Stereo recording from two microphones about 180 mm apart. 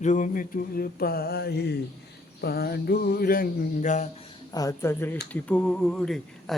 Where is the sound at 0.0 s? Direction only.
45° left (ahead or behind).